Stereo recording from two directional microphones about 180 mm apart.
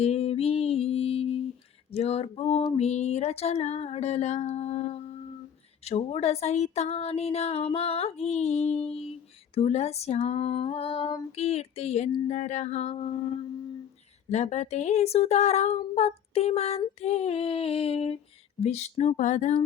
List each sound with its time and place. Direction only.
0.0 s music: 35° left (ahead or behind)
1.9 s speech: 35° left (ahead or behind)
2.7 s a sound: 35° left (ahead or behind)
5.8 s speech: 35° left (ahead or behind)
14.3 s speech: 40° left (ahead or behind)